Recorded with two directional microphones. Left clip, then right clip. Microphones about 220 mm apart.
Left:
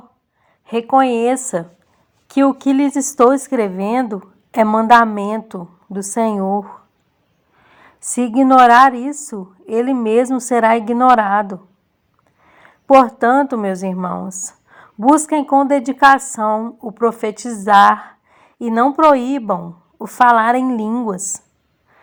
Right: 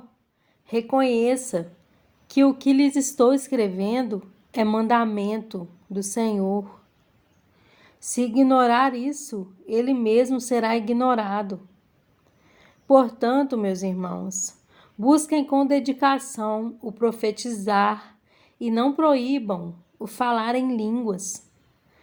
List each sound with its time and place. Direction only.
0.6 s a woman's voice: 25° left (ahead or behind)
12.5 s a sound: 20° left (ahead or behind)
13.0 s a woman's voice: 20° left (ahead or behind)
14.3 s a sound: 20° left (ahead or behind)
14.9 s a woman's voice: 35° left (ahead or behind)
15.2 s a woman's voice: 20° left (ahead or behind)